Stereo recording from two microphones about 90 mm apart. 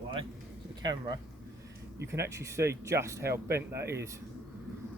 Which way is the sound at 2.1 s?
30° right (ahead or behind).